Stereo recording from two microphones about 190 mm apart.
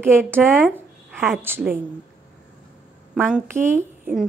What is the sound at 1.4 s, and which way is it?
Speech, 10° right (ahead or behind).